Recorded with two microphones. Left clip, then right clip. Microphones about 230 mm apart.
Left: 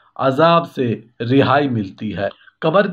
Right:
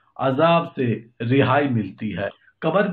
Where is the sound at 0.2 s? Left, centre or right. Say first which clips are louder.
Left 4 dB; left.